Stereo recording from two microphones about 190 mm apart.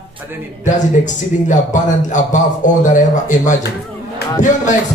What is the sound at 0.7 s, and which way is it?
A man's voice, 40° left (ahead or behind).